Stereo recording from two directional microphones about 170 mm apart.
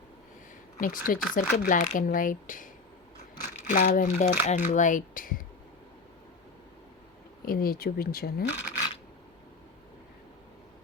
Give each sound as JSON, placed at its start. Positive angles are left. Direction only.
{"t": 0.8, "sound": "speech", "side_deg": 55}
{"t": 7.4, "sound": "speech", "side_deg": 60}